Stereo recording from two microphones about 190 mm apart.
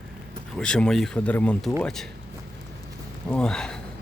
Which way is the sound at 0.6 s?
5° left (ahead or behind).